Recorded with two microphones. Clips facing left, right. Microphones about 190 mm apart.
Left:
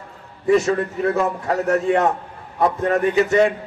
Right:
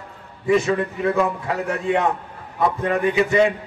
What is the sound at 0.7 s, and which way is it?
A man's voice, 40° left (ahead or behind).